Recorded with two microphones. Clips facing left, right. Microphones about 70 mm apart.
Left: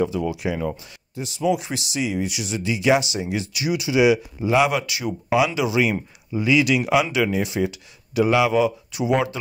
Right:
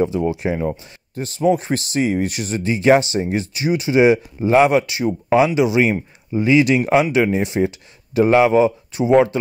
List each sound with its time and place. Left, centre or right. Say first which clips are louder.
0.0 s speech: right 4 dB; right
1.1 s speech: right 5 dB; right